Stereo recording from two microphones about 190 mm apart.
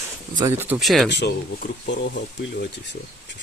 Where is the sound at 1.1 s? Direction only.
60° left (ahead or behind).